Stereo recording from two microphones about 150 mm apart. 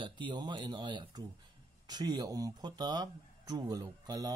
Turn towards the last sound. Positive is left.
turn(degrees=-25)  # may be behind; listen again after turning